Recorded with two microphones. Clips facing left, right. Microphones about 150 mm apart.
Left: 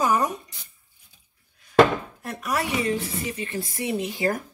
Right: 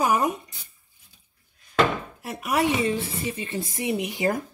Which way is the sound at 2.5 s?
20° right (ahead or behind).